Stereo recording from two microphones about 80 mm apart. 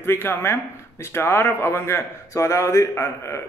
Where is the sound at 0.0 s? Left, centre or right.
Left.